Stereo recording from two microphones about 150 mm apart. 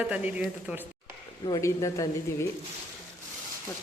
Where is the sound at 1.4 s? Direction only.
25° left (ahead or behind).